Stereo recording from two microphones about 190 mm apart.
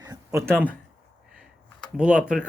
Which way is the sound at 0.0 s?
15° right (ahead or behind).